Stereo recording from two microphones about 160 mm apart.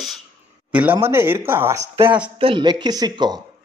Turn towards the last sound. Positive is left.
turn(degrees=-25)  # may be behind; listen again after turning